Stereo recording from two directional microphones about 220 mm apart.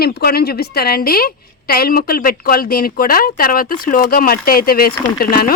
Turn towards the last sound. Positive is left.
turn(degrees=40)  # may be behind; listen again after turning